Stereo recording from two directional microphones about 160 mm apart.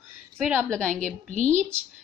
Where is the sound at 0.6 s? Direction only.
5° left (ahead or behind).